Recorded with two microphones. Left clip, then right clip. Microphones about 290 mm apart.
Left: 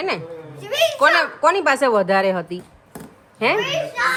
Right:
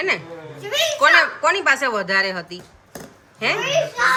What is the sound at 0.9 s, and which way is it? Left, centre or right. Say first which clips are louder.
Speech: right 4 dB; centre.